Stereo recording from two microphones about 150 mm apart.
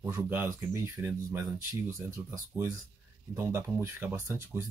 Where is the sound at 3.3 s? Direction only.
15° right (ahead or behind).